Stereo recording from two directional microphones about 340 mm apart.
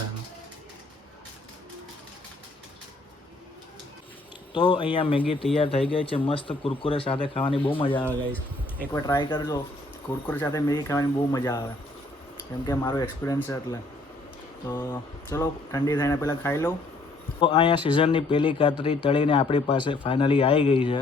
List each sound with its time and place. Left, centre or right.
4.5 s speech: centre
12.6 s speech: centre
15.3 s speech: centre